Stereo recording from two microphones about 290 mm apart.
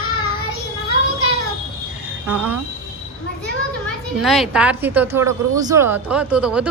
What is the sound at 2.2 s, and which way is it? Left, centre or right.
Speech, centre.